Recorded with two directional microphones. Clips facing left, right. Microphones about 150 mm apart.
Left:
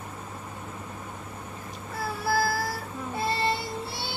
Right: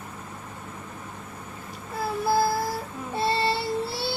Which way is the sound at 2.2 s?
20° right (ahead or behind).